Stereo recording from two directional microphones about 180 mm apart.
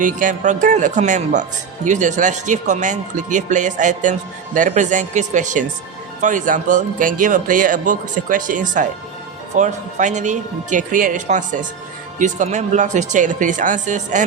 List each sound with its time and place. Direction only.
0.0 s speech: 45° right (ahead or behind)